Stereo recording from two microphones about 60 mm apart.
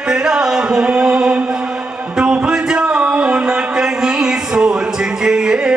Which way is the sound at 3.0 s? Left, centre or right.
Centre.